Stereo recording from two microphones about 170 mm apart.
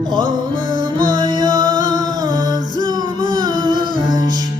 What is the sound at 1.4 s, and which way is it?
Music, 25° right (ahead or behind).